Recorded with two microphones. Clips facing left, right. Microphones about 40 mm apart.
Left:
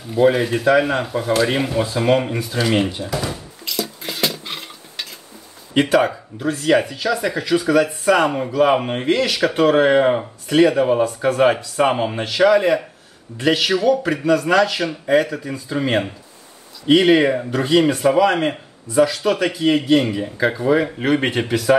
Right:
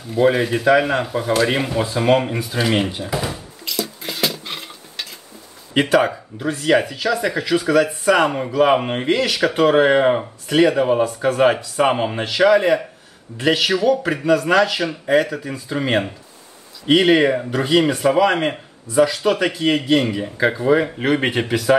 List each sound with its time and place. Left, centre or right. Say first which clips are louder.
0.1 s speech: left 1 dB; centre
3.6 s dishes: even; centre
5.8 s speech: even; centre